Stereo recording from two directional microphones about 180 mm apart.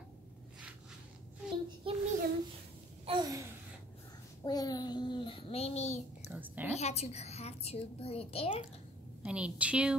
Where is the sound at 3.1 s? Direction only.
20° right (ahead or behind).